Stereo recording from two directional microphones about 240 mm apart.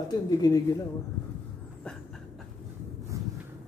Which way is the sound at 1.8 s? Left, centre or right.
Centre.